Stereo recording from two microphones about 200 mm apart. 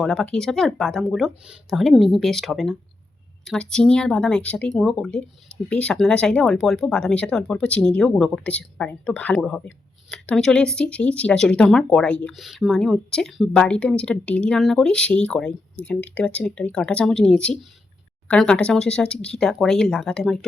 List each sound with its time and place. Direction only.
0.0 s speech: 5° left (ahead or behind)